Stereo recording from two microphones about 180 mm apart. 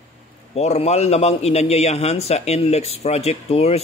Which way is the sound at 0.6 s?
35° left (ahead or behind).